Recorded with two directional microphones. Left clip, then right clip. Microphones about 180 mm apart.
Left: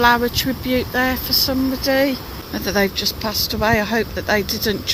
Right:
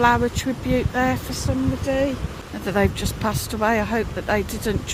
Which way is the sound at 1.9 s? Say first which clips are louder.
Left 5 dB; 10° left (ahead or behind).